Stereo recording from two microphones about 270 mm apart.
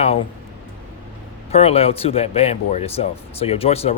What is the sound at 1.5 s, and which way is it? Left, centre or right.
Speech, left.